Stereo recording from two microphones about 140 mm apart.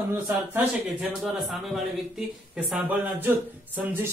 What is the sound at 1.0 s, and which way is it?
Speech, centre (ahead or behind).